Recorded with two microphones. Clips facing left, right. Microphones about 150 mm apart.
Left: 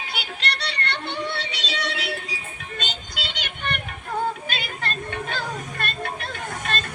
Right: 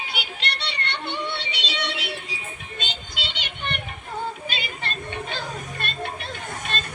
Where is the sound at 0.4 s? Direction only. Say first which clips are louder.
Left 4 dB; 45° left (ahead or behind).